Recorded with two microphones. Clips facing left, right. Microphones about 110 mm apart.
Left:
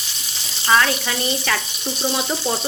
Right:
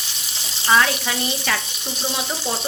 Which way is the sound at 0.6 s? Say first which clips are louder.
Even; 10° right (ahead or behind).